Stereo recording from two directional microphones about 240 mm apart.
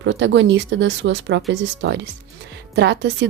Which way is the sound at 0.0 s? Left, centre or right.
Right.